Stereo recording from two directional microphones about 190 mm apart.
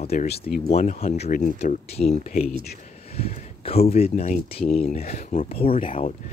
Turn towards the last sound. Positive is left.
turn(degrees=30)  # may be behind; listen again after turning